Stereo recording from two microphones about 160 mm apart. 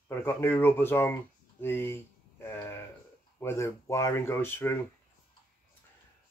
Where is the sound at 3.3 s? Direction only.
15° left (ahead or behind).